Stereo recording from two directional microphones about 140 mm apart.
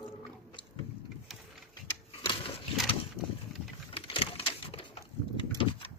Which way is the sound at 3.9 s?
40° left (ahead or behind).